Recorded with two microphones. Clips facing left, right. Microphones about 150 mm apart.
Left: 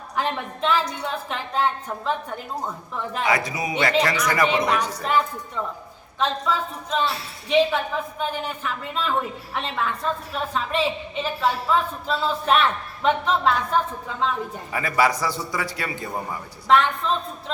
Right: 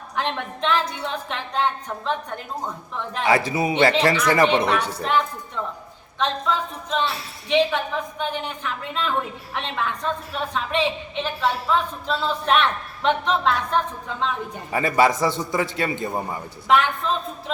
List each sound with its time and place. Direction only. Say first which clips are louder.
0.2 s a woman's voice: even; 5° left (ahead or behind)
3.2 s a man's voice: right 5 dB; 30° right (ahead or behind)
5.0 s a woman's voice: even; 5° left (ahead or behind)
14.7 s a man's voice: right 3 dB; 25° right (ahead or behind)
16.6 s a woman's voice: left 1 dB; centre (ahead or behind)